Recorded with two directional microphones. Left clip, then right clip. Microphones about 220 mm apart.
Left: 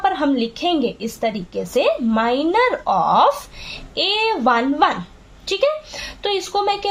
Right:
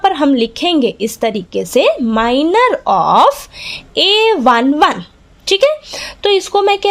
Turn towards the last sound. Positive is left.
turn(degrees=-45)  # may be behind; listen again after turning